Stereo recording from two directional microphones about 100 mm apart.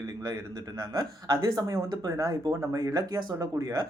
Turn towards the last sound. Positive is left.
turn(degrees=-35)  # may be behind; listen again after turning